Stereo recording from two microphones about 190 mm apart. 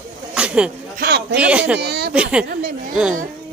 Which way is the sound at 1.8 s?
60° right (ahead or behind).